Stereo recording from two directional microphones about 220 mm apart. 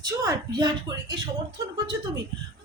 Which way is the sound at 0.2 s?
20° right (ahead or behind).